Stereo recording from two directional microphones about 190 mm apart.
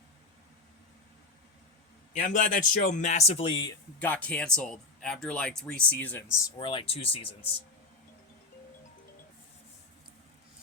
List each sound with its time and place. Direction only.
2.1 s speech: 40° left (ahead or behind); by 3.7 s 25° left (ahead or behind)
4.0 s speech: 10° left (ahead or behind)
6.4 s speech: 25° left (ahead or behind)